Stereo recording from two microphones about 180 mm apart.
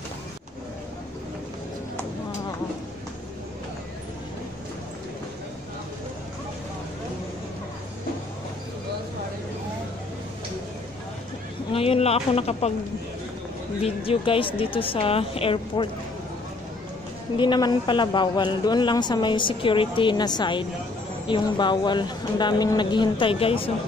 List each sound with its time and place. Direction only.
11.7 s speech: 30° left (ahead or behind)
13.8 s speech: 30° left (ahead or behind)
17.4 s speech: 25° left (ahead or behind)